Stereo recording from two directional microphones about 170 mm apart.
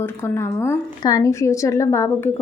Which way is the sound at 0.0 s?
15° left (ahead or behind).